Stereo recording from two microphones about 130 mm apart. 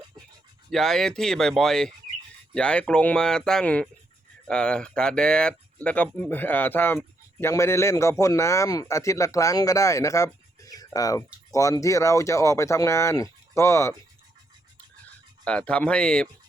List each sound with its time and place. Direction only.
0.7 s speech: 5° left (ahead or behind); by 13.9 s 20° left (ahead or behind)
15.4 s speech: 10° left (ahead or behind)